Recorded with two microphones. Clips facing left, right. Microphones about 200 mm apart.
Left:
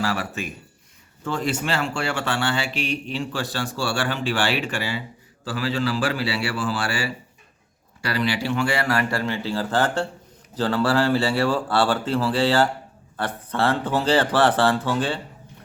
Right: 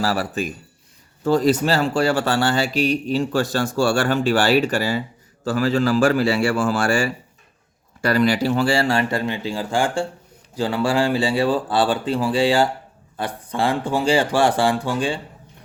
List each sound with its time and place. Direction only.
0.0 s a man's voice: 35° right (ahead or behind); by 15.2 s 15° right (ahead or behind)